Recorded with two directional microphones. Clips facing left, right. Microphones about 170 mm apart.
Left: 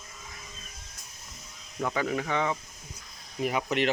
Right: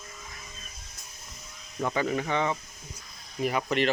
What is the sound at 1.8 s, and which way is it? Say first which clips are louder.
Speech: right 1 dB; centre (ahead or behind).